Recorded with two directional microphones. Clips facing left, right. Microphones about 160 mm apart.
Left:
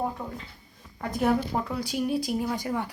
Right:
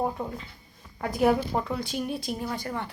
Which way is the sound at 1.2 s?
Centre (ahead or behind).